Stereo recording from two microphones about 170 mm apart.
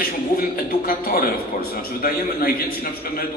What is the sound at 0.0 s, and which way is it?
A man's voice, 60° left (ahead or behind).